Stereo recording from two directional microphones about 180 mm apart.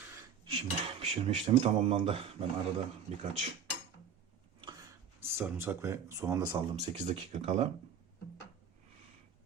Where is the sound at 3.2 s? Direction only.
35° right (ahead or behind).